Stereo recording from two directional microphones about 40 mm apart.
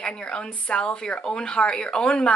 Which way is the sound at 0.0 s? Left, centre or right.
Left.